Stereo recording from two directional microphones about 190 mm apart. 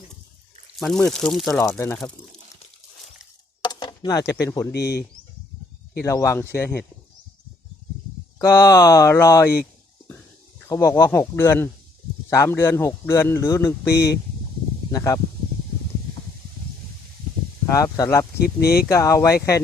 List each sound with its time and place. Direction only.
0.8 s speech: centre (ahead or behind)
1.8 s speech: 10° left (ahead or behind)
3.6 s chopping: 25° left (ahead or behind)
4.4 s speech: 15° left (ahead or behind)
4.7 s speech: 60° left (ahead or behind)
6.0 s speech: 15° left (ahead or behind)
8.4 s speech: 15° left (ahead or behind)
10.7 s speech: 15° left (ahead or behind)
13.9 s speech: 60° left (ahead or behind)
14.9 s speech: 15° left (ahead or behind)
17.7 s speech: 15° left (ahead or behind)
18.3 s speech: 55° left (ahead or behind)
18.9 s speech: 15° left (ahead or behind)